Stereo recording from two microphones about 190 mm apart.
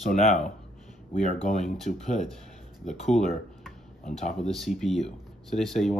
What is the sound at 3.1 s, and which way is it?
Speech, 5° left (ahead or behind).